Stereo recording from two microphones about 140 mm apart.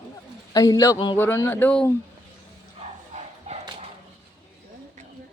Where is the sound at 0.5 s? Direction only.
25° left (ahead or behind); by 1.9 s 10° left (ahead or behind).